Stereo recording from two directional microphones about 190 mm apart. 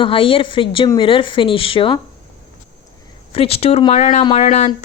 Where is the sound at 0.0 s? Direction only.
30° left (ahead or behind).